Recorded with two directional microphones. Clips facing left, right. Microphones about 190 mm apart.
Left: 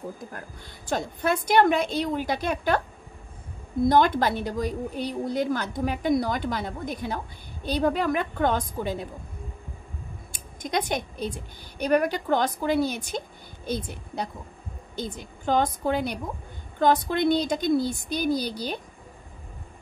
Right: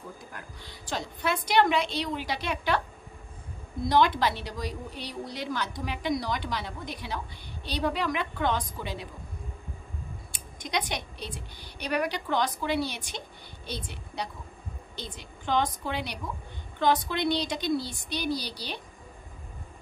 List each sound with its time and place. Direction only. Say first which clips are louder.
0.3 s a woman's voice: left 3 dB; 45° left (ahead or behind)
3.8 s a woman's voice: left 4 dB; 50° left (ahead or behind)
10.6 s a woman's voice: left 5 dB; 45° left (ahead or behind)